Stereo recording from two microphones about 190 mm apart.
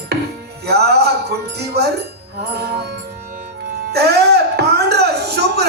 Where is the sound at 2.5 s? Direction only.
60° right (ahead or behind).